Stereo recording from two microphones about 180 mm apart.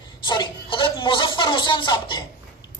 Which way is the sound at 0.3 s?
25° left (ahead or behind).